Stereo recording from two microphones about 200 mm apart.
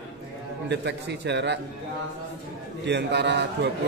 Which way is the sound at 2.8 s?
60° right (ahead or behind).